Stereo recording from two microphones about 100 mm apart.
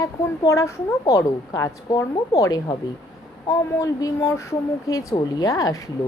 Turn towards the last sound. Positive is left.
turn(degrees=35)  # may be behind; listen again after turning